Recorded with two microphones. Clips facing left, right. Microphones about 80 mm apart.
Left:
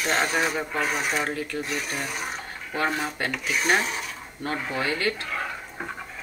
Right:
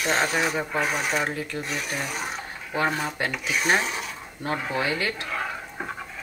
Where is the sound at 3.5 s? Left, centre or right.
Centre.